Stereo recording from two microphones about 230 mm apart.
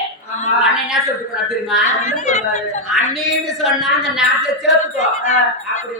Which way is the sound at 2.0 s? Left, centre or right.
Left.